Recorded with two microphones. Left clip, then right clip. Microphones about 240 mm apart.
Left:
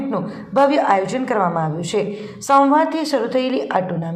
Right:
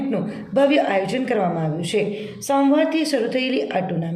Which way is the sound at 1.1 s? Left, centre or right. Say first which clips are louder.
Left 1 dB; left.